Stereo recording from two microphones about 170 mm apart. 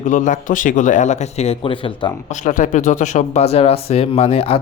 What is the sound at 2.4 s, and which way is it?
Speech, 50° left (ahead or behind).